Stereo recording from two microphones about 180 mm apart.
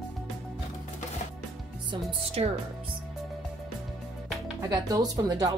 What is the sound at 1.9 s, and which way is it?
Speech, 30° right (ahead or behind).